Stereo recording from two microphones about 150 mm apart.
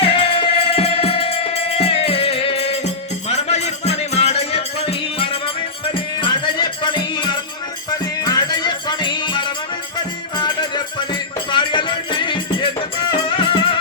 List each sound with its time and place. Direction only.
0.0 s music: 40° left (ahead or behind)
6.2 s music: 30° left (ahead or behind)